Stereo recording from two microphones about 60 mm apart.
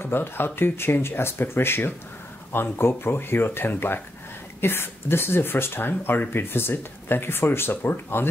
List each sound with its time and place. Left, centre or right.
0.0 s speech: left